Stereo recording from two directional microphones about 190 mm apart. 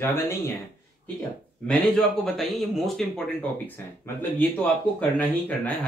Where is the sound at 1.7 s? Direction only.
5° left (ahead or behind).